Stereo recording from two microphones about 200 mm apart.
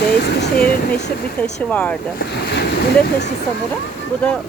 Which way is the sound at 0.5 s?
5° left (ahead or behind).